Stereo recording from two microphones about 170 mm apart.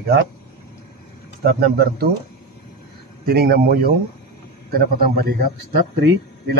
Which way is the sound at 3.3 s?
65° right (ahead or behind).